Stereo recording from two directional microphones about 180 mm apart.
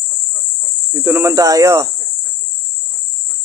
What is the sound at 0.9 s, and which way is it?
Speech, 15° right (ahead or behind).